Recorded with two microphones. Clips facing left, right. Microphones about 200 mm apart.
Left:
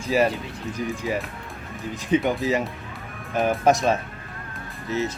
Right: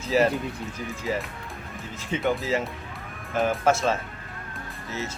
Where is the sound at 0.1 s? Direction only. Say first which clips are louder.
Even; 15° left (ahead or behind).